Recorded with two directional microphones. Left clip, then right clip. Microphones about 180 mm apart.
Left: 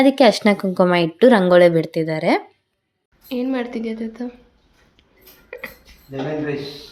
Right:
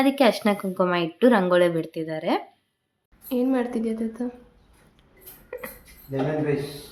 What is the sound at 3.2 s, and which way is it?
Speech, 10° right (ahead or behind).